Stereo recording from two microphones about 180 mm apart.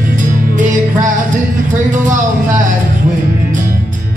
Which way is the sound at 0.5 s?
45° right (ahead or behind).